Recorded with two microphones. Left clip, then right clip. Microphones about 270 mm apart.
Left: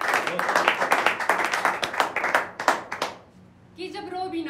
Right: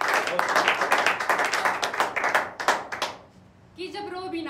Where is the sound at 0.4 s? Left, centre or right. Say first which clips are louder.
Right 1 dB; right.